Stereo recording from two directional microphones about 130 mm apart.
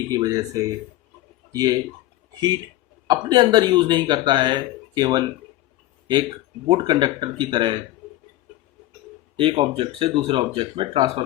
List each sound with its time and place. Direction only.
0.1 s speech: 30° right (ahead or behind)
3.1 s speech: 35° right (ahead or behind)
6.7 s speech: 40° right (ahead or behind)
9.4 s speech: 40° right (ahead or behind)